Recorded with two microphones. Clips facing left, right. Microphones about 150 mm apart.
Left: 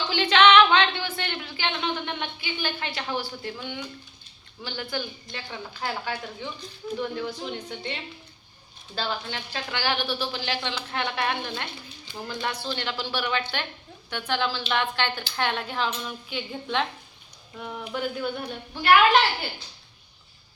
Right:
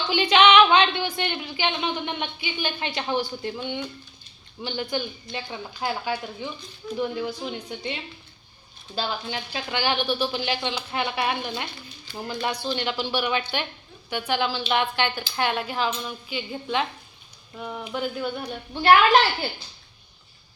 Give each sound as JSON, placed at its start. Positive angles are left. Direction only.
{"t": 0.1, "sound": "a sound", "side_deg": -15}
{"t": 4.6, "sound": "a woman's voice", "side_deg": -20}
{"t": 9.0, "sound": "a woman's voice", "side_deg": -10}
{"t": 18.7, "sound": "a woman's voice", "side_deg": -30}